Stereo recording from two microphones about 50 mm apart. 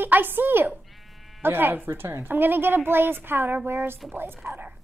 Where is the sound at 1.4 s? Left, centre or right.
Right.